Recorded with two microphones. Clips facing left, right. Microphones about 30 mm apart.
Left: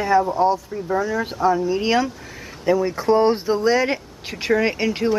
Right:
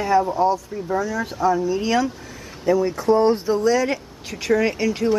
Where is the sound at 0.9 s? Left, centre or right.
Centre.